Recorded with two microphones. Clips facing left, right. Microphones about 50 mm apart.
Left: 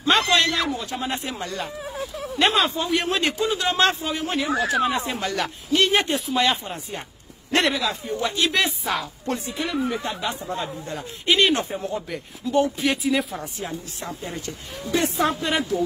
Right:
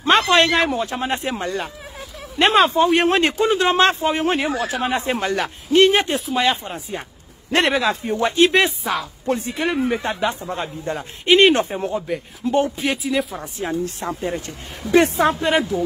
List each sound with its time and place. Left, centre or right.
0.0 s a woman's voice: right
6.3 s speech: centre
7.5 s a woman's voice: right
8.8 s speech: centre
9.4 s a woman's voice: right
12.1 s speech: centre
12.4 s a woman's voice: right
12.8 s speech: centre
13.4 s a woman's voice: right